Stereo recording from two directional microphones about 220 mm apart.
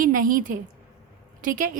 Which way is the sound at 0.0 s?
40° right (ahead or behind).